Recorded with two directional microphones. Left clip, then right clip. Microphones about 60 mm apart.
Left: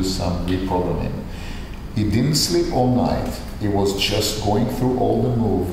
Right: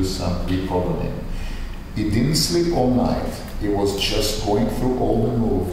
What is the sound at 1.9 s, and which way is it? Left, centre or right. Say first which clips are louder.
Speech: even; left.